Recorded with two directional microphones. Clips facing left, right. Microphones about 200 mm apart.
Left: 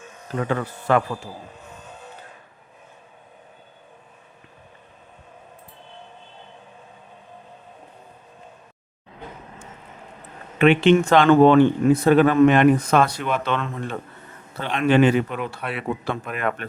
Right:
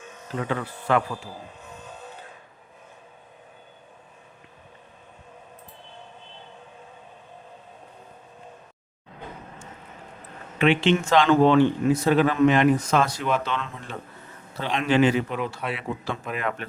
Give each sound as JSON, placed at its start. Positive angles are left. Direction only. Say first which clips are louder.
{"t": 0.4, "sound": "speech", "louder": "left 4 dB", "side_deg": 45}
{"t": 10.6, "sound": "speech", "louder": "left 5 dB", "side_deg": 55}